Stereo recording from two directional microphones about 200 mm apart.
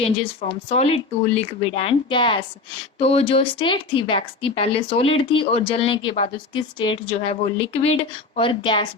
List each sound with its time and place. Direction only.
0.0 s speech: 30° left (ahead or behind)